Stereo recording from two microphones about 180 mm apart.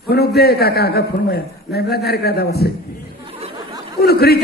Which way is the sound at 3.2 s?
30° right (ahead or behind).